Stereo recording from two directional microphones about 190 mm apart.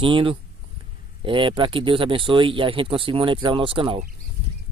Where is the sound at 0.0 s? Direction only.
25° right (ahead or behind).